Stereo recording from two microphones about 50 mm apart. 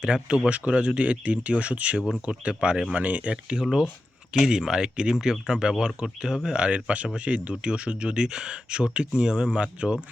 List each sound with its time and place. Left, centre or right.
0.0 s speech: centre
3.6 s speech: centre